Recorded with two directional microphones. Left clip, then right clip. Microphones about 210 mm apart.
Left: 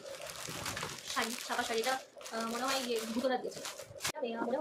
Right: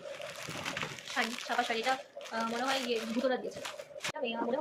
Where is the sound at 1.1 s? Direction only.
15° left (ahead or behind).